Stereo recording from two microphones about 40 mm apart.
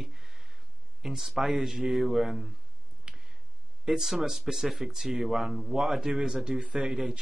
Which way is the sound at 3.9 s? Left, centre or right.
Centre.